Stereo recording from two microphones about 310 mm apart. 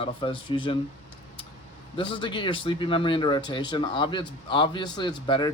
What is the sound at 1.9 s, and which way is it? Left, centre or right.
Speech, centre.